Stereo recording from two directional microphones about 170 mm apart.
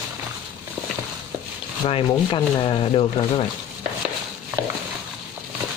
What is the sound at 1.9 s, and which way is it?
Speech, 30° left (ahead or behind).